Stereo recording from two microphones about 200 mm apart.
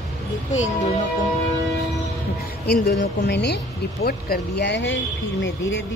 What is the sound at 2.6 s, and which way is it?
A woman's voice, 55° left (ahead or behind).